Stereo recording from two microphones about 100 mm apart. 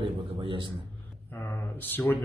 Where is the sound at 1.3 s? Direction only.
20° left (ahead or behind).